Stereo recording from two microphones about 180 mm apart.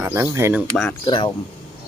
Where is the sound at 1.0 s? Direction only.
30° left (ahead or behind).